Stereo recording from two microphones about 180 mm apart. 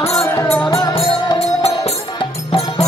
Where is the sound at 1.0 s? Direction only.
35° left (ahead or behind).